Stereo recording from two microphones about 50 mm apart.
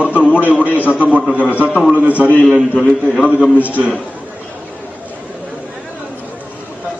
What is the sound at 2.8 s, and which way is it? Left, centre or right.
Speech, centre.